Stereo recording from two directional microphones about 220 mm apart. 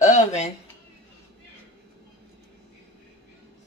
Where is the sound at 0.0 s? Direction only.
35° left (ahead or behind).